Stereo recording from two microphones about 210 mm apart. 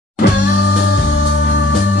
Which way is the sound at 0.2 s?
50° left (ahead or behind).